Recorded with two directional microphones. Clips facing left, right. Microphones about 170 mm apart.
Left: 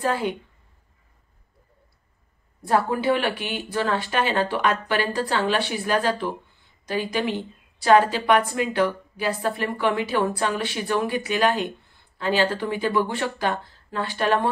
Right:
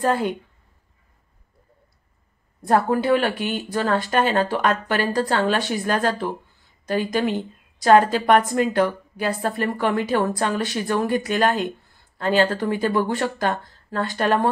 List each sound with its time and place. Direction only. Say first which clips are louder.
0.0 s a woman's voice: right 3 dB; 45° right (ahead or behind)
2.6 s a woman's voice: right 2 dB; 45° right (ahead or behind)